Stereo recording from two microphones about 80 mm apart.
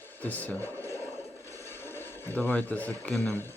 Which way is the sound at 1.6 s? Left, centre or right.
Left.